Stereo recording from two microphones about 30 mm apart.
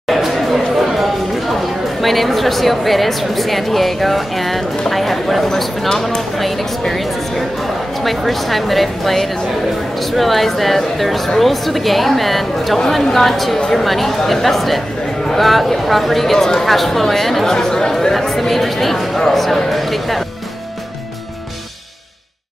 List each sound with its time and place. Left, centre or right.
0.1 s speech: centre
6.8 s a sound: centre
8.0 s a woman's voice: centre
17.5 s speech: centre
18.2 s speech: centre